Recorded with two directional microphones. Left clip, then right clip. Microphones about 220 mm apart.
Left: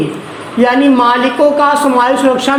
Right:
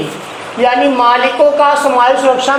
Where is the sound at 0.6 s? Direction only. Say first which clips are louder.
Even; 35° left (ahead or behind).